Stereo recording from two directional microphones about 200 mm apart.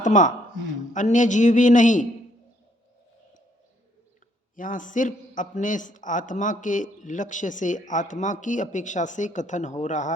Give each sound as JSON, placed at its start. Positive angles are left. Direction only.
{"t": 0.0, "sound": "a man's voice", "side_deg": 40}
{"t": 4.5, "sound": "a man's voice", "side_deg": 40}